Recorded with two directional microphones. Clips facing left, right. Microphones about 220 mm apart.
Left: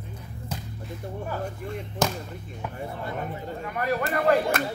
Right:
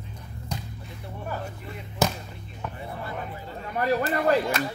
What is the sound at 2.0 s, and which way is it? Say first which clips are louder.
Speech: right 1 dB; 5° right (ahead or behind).